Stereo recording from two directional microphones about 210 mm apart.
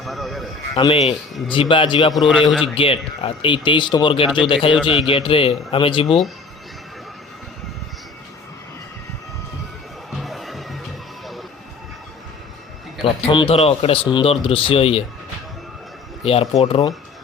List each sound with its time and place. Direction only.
0.0 s a man's voice: centre (ahead or behind)
1.5 s speech: 25° left (ahead or behind)
2.1 s a man's voice: centre (ahead or behind)
2.7 s speech: 25° left (ahead or behind)
10.2 s music: centre (ahead or behind)
13.0 s speech: 25° left (ahead or behind)
16.2 s speech: 25° left (ahead or behind)